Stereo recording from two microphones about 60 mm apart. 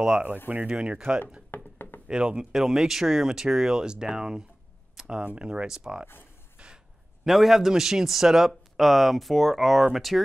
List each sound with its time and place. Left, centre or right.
0.0 s speech: centre
1.5 s a sound: left
2.0 s speech: centre
7.2 s a man's voice: centre